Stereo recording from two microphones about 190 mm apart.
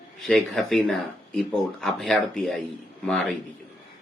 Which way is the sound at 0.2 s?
Centre (ahead or behind).